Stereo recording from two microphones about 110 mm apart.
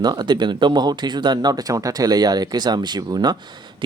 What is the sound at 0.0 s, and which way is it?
Speech, 40° right (ahead or behind).